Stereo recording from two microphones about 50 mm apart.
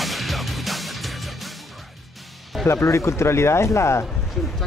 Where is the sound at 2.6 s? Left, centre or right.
Left.